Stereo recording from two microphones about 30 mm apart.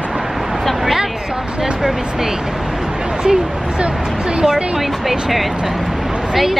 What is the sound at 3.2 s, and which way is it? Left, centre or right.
A woman's voice, right.